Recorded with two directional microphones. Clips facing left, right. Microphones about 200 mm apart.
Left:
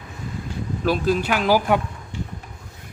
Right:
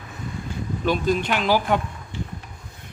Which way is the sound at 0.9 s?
5° left (ahead or behind).